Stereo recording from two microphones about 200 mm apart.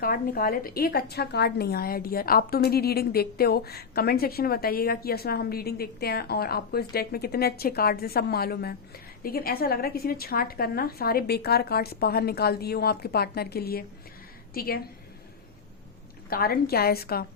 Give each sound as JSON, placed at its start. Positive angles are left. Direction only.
{"t": 0.0, "sound": "a woman's voice", "side_deg": 45}
{"t": 16.3, "sound": "a woman's voice", "side_deg": 50}